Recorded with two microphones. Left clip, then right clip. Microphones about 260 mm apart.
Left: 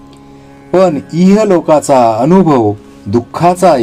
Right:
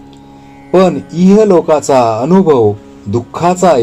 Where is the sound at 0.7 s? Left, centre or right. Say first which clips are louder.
Even; left.